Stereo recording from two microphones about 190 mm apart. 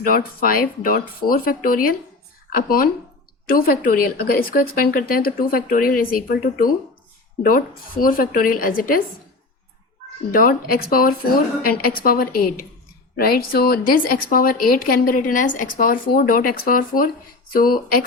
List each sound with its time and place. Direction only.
0.0 s speech: 50° left (ahead or behind)
10.3 s speech: 50° left (ahead or behind)